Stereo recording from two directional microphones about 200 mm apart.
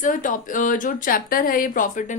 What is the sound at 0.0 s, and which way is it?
A woman's voice, 40° left (ahead or behind).